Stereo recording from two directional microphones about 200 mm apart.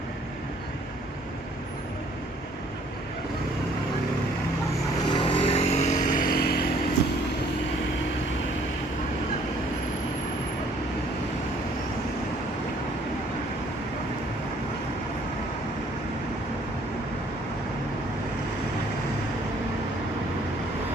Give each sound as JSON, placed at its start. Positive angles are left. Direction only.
{"t": 5.0, "sound": "vehicle", "side_deg": 25}